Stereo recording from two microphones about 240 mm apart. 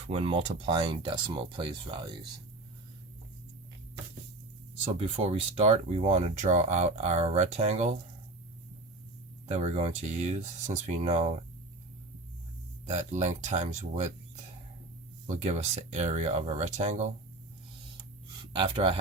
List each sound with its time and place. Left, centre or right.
0.1 s speech: right
4.9 s speech: right
9.5 s speech: right
12.8 s speech: right
15.3 s speech: right
18.5 s speech: right